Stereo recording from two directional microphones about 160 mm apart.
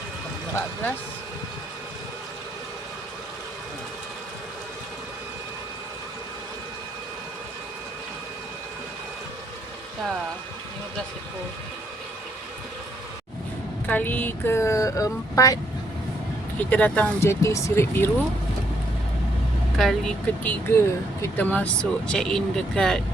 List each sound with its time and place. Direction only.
13.8 s speech: 10° left (ahead or behind)
16.6 s speech: 10° left (ahead or behind)
19.7 s speech: centre (ahead or behind)